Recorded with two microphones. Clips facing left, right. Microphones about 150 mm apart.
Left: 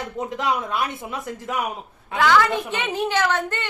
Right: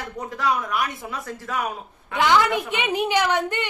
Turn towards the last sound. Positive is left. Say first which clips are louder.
# right 1 dB
turn(degrees=-15)  # may be behind; listen again after turning